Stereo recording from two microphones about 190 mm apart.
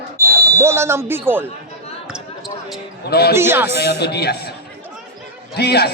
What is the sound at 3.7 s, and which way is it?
Speech, 60° left (ahead or behind).